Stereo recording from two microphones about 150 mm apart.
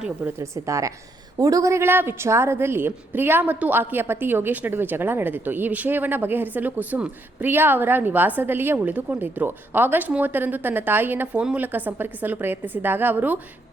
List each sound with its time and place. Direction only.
0.0 s a woman's voice: 15° right (ahead or behind)